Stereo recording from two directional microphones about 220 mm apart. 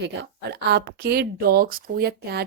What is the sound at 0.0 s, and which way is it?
Speech, 50° right (ahead or behind).